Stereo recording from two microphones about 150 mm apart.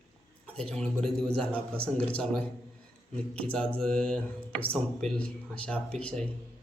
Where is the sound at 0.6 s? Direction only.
5° left (ahead or behind).